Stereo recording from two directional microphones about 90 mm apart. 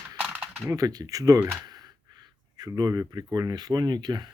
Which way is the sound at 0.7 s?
45° right (ahead or behind).